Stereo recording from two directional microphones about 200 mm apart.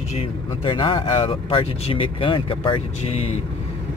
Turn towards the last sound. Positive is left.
turn(degrees=30)  # may be behind; listen again after turning